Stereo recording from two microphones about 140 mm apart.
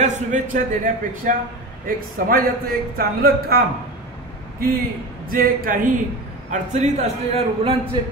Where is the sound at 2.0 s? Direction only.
90° right.